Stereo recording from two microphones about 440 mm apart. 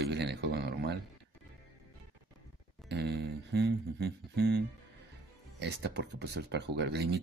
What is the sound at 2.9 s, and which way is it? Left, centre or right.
Speech, right.